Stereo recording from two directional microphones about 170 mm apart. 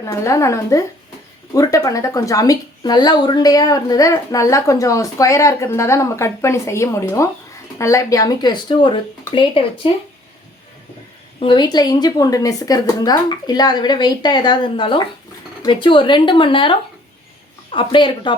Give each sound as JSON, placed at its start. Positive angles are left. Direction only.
{"t": 0.0, "sound": "a woman's voice", "side_deg": 20}
{"t": 11.3, "sound": "a woman's voice", "side_deg": 25}
{"t": 17.7, "sound": "a woman's voice", "side_deg": 30}